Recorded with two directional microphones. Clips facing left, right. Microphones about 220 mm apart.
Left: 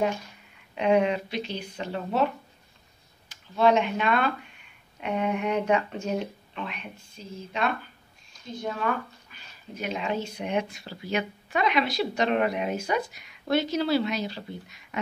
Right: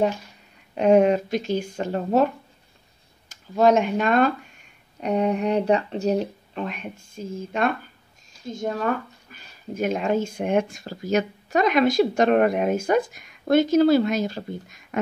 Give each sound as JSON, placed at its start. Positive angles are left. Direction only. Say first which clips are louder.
{"t": 0.7, "sound": "speech", "louder": "right 6 dB", "side_deg": -45}